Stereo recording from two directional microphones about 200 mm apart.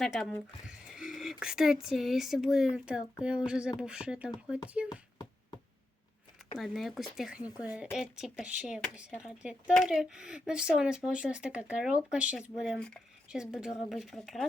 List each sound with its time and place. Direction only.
0.0 s speech: centre (ahead or behind)
4.9 s a sound: 20° left (ahead or behind)
6.6 s speech: centre (ahead or behind)